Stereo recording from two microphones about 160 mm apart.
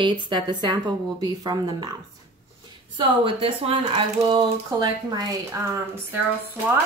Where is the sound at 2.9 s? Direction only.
35° right (ahead or behind).